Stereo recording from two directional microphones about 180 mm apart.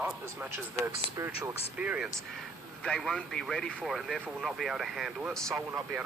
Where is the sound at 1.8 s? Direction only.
5° right (ahead or behind).